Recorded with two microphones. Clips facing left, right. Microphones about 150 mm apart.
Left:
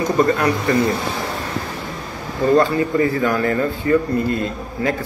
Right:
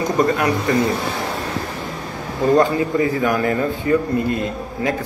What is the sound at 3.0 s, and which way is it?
A man's voice, 20° right (ahead or behind).